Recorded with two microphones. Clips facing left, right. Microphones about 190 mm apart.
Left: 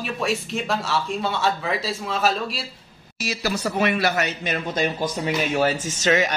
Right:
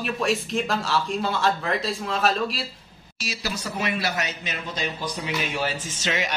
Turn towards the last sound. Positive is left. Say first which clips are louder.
# left 7 dB
turn(degrees=45)  # may be behind; listen again after turning